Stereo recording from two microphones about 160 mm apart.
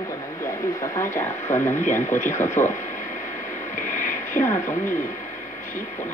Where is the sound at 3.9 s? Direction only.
15° left (ahead or behind).